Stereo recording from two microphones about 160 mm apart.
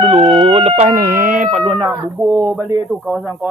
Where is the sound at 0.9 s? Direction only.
70° right (ahead or behind).